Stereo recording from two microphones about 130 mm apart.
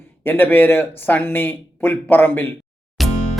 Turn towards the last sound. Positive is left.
turn(degrees=0)  # may be behind; listen again after turning